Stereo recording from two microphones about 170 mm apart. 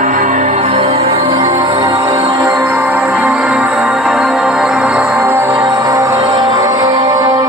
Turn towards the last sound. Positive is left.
turn(degrees=-20)  # may be behind; listen again after turning